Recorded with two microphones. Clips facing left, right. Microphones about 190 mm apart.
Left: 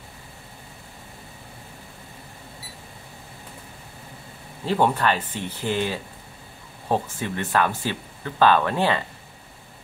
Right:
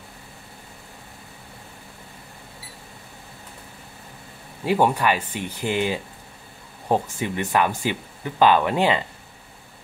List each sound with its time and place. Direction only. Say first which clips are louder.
4.6 s speech: right 1 dB; 10° right (ahead or behind)